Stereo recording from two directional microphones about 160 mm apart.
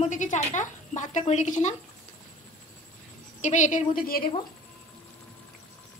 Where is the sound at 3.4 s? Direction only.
50° left (ahead or behind).